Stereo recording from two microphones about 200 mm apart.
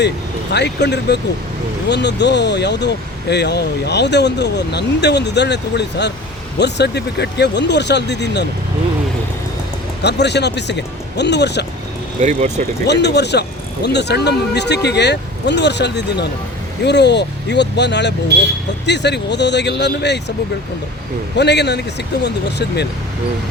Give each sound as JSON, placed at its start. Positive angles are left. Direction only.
{"t": 0.5, "sound": "speech", "side_deg": 60}
{"t": 10.0, "sound": "speech", "side_deg": 55}
{"t": 12.2, "sound": "speech", "side_deg": -35}
{"t": 12.9, "sound": "speech", "side_deg": 55}
{"t": 21.3, "sound": "speech", "side_deg": 60}